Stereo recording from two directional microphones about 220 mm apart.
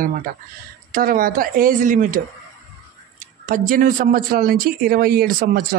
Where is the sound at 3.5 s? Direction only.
40° right (ahead or behind).